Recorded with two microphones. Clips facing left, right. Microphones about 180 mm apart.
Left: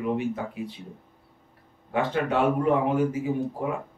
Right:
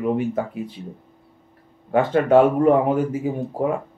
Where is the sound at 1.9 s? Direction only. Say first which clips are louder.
Right 9 dB; 50° right (ahead or behind).